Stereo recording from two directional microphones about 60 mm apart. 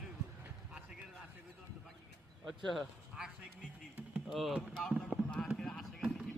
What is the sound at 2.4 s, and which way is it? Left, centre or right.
Speech, centre.